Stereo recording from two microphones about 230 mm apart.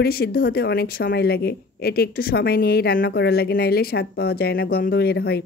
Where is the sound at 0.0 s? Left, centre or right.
Left.